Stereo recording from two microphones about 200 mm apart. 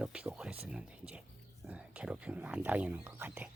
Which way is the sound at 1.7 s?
5° right (ahead or behind).